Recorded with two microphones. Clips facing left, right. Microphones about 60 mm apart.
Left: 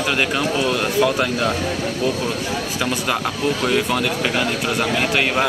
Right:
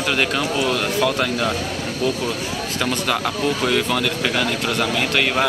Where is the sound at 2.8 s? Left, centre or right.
Centre.